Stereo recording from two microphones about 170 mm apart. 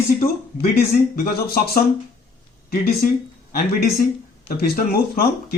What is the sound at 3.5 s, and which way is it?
Speech, 65° left (ahead or behind).